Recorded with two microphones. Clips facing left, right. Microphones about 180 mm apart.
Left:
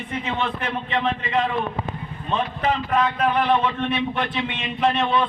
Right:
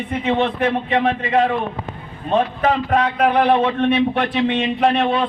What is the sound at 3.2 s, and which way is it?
A man's voice, 60° right (ahead or behind).